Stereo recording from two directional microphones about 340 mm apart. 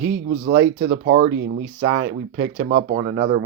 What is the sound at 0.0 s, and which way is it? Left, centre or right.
Speech, right.